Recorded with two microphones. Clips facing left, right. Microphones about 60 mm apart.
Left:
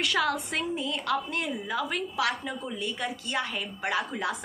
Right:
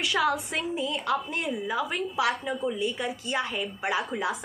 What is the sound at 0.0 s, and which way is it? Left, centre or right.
A woman's voice, centre.